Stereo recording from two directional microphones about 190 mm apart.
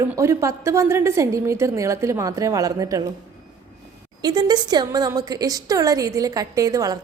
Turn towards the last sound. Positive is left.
turn(degrees=-20)  # may be behind; listen again after turning